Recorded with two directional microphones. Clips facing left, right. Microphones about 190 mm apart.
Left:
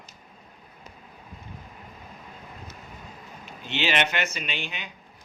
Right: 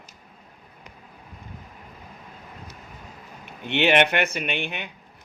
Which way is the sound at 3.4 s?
60° right (ahead or behind).